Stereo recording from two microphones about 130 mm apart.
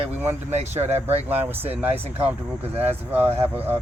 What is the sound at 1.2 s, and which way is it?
Speech, 15° right (ahead or behind).